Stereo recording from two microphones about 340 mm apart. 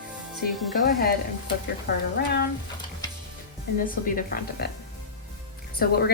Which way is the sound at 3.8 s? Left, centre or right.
Left.